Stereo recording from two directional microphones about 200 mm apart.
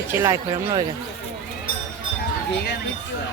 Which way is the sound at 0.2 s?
15° right (ahead or behind).